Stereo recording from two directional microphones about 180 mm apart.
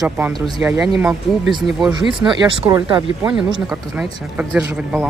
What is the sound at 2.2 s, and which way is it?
Speech, 25° right (ahead or behind).